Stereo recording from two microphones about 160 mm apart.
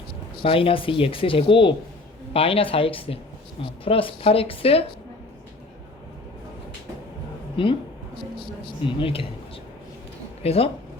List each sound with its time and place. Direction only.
0.4 s speech: 35° left (ahead or behind)
7.5 s speech: 35° left (ahead or behind)
8.9 s speech: 35° left (ahead or behind)
10.4 s speech: 40° left (ahead or behind)